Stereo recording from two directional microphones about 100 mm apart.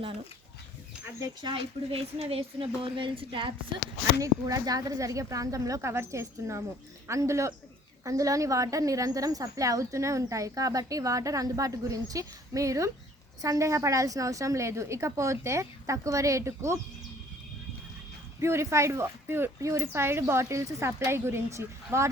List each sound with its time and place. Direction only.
1.9 s speech: 80° right; by 3.5 s 60° right (ahead or behind)
4.2 s a woman's voice: 35° right (ahead or behind)
18.3 s speech: 25° right (ahead or behind)